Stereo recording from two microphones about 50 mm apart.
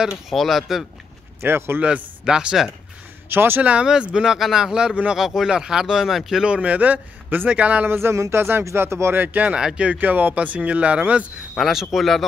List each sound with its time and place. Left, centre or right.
0.3 s speech: centre
1.4 s speech: right
2.2 s speech: centre
3.3 s speech: right
3.8 s speech: centre
6.4 s speech: right
7.8 s speech: right
8.1 s speech: right
9.1 s speech: right
9.6 s speech: centre
9.9 s speech: right
11.5 s speech: centre